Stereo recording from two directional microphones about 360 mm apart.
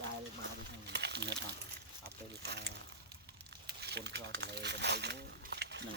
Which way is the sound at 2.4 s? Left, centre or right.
Right.